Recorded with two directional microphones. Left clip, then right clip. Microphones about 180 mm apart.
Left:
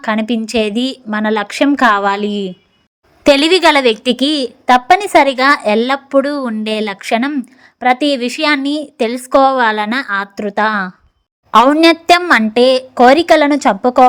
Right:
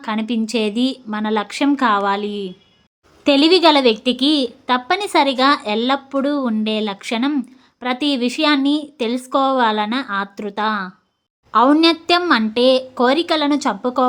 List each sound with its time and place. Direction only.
0.0 s a woman's voice: 25° left (ahead or behind)